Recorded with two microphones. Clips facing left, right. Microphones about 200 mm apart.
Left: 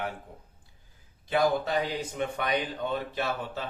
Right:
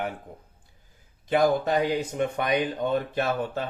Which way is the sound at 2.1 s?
50° right (ahead or behind).